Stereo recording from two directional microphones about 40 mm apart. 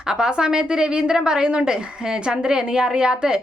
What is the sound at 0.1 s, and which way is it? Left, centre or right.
A woman's voice, centre.